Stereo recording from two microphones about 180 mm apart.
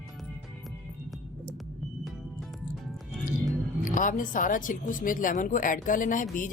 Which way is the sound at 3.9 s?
50° left (ahead or behind).